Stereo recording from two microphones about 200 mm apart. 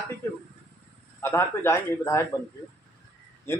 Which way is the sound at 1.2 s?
10° left (ahead or behind).